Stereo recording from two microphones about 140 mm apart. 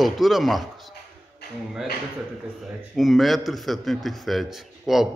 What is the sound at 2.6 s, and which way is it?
A man's voice, centre (ahead or behind).